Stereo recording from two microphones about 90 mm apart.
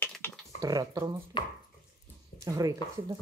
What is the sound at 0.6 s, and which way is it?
Speech, 45° right (ahead or behind).